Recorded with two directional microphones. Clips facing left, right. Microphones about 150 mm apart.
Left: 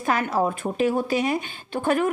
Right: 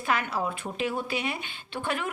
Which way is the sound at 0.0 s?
45° left (ahead or behind).